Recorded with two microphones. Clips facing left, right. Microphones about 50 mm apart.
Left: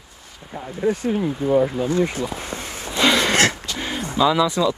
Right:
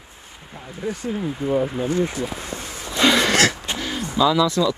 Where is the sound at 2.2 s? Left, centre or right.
Left.